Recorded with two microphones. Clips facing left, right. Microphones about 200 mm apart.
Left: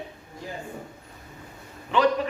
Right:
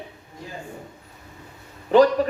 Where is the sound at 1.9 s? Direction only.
40° right (ahead or behind).